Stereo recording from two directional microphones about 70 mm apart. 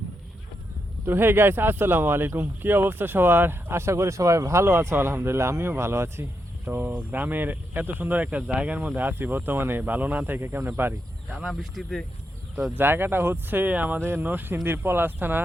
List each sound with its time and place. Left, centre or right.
1.0 s speech: right
6.7 s speech: right
11.3 s speech: centre
12.7 s speech: right